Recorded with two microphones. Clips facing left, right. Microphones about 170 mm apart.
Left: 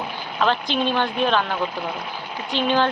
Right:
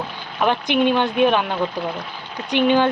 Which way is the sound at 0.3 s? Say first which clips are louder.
Right 3 dB; 15° right (ahead or behind).